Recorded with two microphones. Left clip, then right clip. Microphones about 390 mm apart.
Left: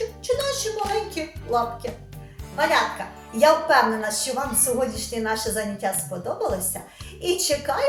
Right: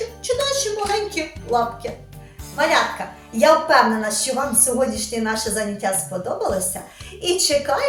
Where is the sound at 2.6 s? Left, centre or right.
Left.